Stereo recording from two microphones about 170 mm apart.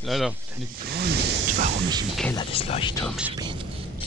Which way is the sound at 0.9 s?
70° right (ahead or behind).